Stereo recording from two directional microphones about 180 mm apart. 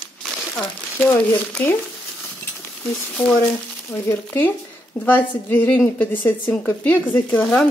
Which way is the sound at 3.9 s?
10° left (ahead or behind).